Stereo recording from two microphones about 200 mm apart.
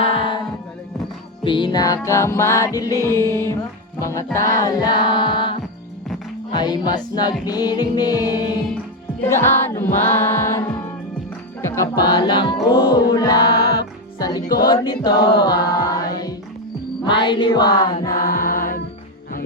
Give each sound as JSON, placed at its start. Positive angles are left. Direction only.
{"t": 1.5, "sound": "music", "side_deg": 25}
{"t": 11.7, "sound": "music", "side_deg": 20}
{"t": 18.1, "sound": "mantra", "side_deg": 45}